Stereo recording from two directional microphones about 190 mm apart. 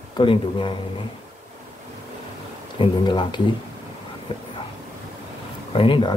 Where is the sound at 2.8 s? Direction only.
25° left (ahead or behind).